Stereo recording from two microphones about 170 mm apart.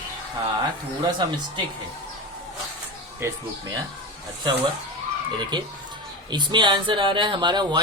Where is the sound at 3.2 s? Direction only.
15° right (ahead or behind).